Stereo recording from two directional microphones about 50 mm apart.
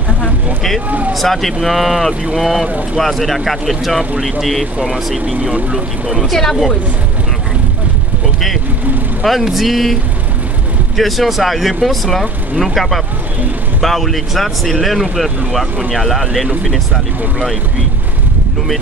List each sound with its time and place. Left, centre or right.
0.8 s speech: right
1.1 s speech: centre
5.4 s speech: right
6.3 s speech: centre
9.2 s speech: centre
11.0 s speech: centre